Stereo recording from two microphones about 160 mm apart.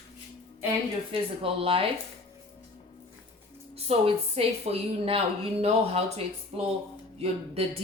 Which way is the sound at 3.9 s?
40° right (ahead or behind).